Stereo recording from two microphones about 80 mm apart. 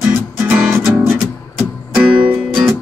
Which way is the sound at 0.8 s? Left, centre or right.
Centre.